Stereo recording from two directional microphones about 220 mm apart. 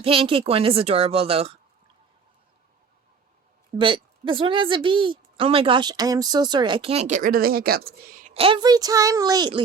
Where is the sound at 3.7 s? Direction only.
20° right (ahead or behind).